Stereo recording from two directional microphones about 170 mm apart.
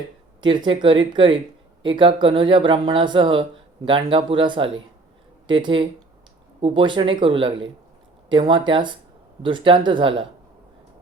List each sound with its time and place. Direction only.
0.4 s speech: 25° right (ahead or behind)